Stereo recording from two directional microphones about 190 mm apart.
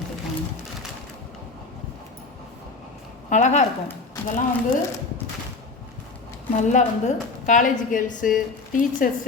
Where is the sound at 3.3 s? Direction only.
40° left (ahead or behind).